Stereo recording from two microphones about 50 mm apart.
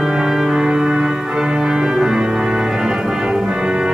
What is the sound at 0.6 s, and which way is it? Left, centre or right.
Music, centre.